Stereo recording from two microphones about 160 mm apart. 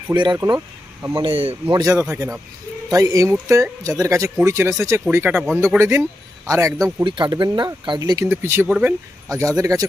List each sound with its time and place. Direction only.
0.1 s speech: 25° right (ahead or behind)
1.2 s speech: 35° right (ahead or behind)
1.7 s a man's voice: 20° right (ahead or behind)
8.3 s a man's voice: 15° right (ahead or behind)